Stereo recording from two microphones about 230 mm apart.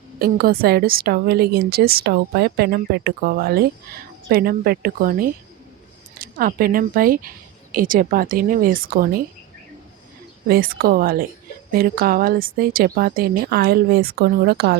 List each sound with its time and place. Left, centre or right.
0.2 s a woman's voice: right
10.5 s a woman's voice: right